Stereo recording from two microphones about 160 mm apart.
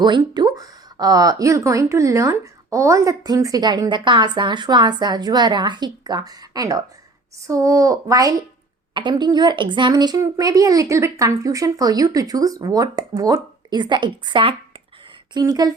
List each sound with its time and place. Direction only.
0.0 s speech: 25° right (ahead or behind)